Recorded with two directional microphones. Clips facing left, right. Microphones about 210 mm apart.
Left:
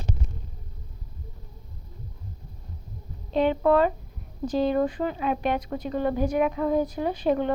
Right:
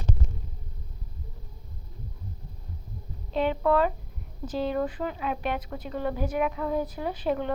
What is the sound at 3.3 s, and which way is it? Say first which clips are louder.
Speech: left 3 dB; 30° left (ahead or behind).